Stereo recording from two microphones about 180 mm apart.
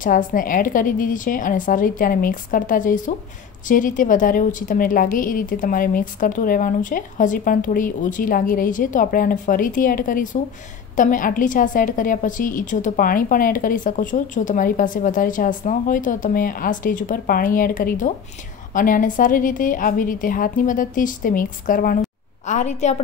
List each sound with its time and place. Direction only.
0.0 s a woman's voice: 50° left (ahead or behind)